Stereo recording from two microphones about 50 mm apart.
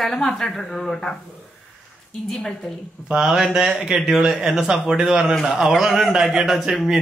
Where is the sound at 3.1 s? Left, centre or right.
Centre.